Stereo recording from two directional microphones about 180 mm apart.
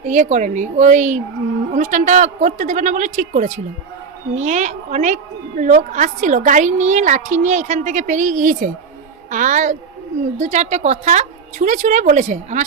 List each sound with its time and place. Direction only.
0.0 s a woman's voice: 40° right (ahead or behind)